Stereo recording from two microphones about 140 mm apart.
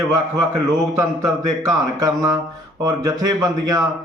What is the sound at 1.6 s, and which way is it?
A man's voice, 25° right (ahead or behind).